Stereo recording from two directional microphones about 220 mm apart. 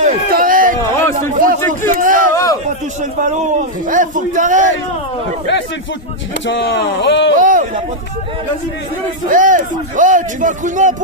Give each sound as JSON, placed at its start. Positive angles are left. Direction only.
{"t": 0.0, "sound": "a sound", "side_deg": -35}
{"t": 2.3, "sound": "a sound", "side_deg": 15}
{"t": 3.0, "sound": "a man's voice", "side_deg": -35}
{"t": 6.4, "sound": "speech", "side_deg": 55}
{"t": 7.3, "sound": "speech", "side_deg": -35}
{"t": 9.3, "sound": "a man's voice", "side_deg": -35}